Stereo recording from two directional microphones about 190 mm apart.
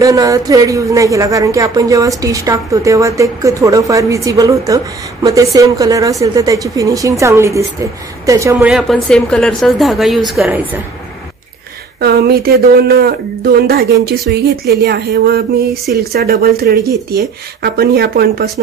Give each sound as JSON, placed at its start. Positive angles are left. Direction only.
{"t": 0.0, "sound": "speech", "side_deg": -15}
{"t": 8.5, "sound": "speech", "side_deg": -5}
{"t": 12.0, "sound": "speech", "side_deg": -55}
{"t": 16.8, "sound": "speech", "side_deg": -15}
{"t": 17.6, "sound": "speech", "side_deg": -55}